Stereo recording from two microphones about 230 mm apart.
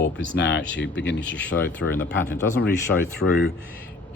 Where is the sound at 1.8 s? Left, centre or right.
Left.